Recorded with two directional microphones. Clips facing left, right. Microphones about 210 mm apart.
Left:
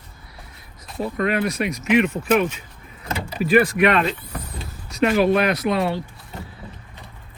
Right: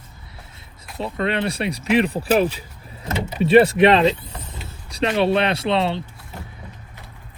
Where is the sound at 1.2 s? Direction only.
30° right (ahead or behind).